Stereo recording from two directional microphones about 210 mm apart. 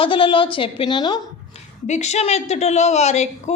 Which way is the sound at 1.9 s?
30° left (ahead or behind).